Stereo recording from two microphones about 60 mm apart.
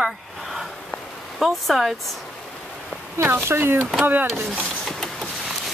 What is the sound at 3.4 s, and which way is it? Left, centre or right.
Speech, right.